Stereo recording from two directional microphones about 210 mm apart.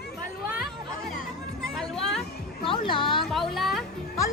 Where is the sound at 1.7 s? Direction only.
Centre (ahead or behind).